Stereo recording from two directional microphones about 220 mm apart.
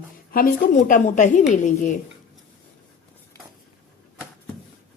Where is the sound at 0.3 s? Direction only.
40° left (ahead or behind).